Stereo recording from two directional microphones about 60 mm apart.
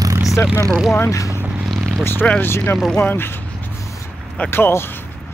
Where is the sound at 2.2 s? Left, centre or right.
Left.